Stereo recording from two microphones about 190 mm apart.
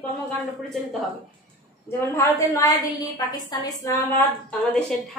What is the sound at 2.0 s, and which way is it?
A woman's voice, 15° left (ahead or behind).